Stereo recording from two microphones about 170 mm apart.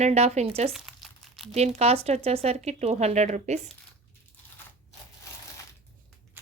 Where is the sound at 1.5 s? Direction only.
40° right (ahead or behind).